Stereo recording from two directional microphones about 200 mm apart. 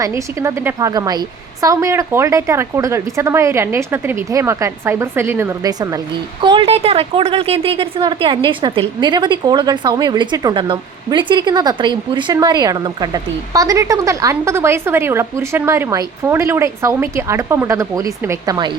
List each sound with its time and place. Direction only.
0.2 s a woman's voice: 15° right (ahead or behind)